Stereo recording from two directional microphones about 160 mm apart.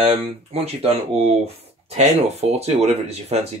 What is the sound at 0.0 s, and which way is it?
Speech, 40° right (ahead or behind).